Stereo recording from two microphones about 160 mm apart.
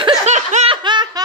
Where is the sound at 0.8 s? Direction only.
30° right (ahead or behind).